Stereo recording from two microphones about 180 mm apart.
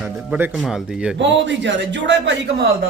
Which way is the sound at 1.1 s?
85° right.